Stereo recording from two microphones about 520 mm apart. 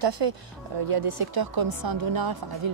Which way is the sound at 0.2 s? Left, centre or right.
Right.